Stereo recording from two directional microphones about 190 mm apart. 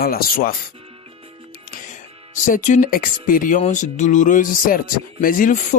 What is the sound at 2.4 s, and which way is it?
Speech, 40° left (ahead or behind).